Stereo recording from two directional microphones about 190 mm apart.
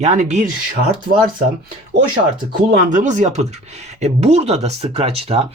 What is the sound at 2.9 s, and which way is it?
Speech, 40° right (ahead or behind).